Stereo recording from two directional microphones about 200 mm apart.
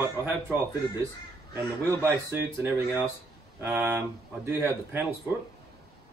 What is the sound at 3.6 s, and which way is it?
Speech, 10° right (ahead or behind).